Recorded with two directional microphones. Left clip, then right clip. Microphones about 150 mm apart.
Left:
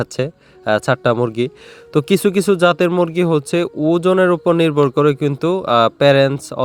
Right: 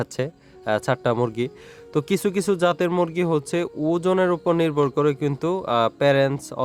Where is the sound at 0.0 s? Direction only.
30° left (ahead or behind).